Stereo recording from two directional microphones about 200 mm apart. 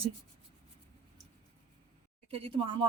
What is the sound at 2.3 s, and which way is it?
Speech, 30° right (ahead or behind).